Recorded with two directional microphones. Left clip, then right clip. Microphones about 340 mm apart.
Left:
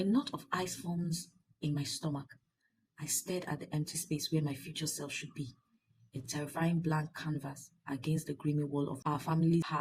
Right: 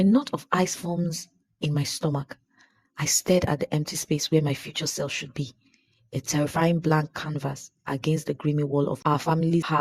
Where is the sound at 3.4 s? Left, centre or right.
Right.